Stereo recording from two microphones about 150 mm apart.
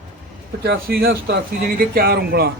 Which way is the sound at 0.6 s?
90° right.